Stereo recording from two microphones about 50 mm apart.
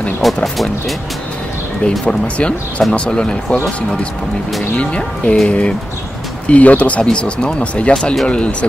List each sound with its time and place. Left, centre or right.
0.2 s speech: centre
1.9 s speech: left
4.7 s speech: left